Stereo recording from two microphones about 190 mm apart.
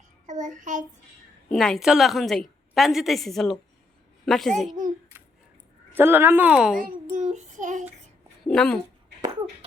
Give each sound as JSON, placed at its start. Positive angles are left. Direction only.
{"t": 0.3, "sound": "child singing", "side_deg": -40}
{"t": 1.5, "sound": "a woman's voice", "side_deg": 0}
{"t": 5.9, "sound": "a woman's voice", "side_deg": -10}
{"t": 6.7, "sound": "child singing", "side_deg": -45}
{"t": 8.4, "sound": "a woman's voice", "side_deg": 5}